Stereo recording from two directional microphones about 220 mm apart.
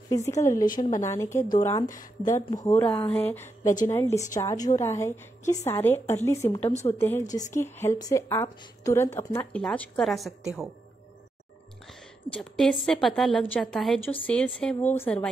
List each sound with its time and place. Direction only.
0.1 s a woman's voice: 15° left (ahead or behind)
0.7 s a woman's voice: 30° left (ahead or behind)
1.0 s a woman's voice: 15° left (ahead or behind)
12.3 s a woman's voice: centre (ahead or behind)